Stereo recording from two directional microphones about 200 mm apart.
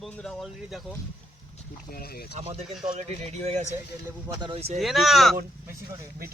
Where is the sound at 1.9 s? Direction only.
50° left (ahead or behind).